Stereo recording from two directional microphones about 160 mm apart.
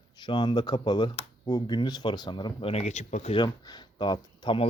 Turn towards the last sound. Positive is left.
turn(degrees=30)  # may be behind; listen again after turning